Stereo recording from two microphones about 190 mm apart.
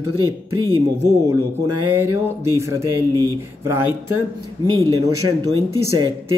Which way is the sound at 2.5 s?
15° right (ahead or behind).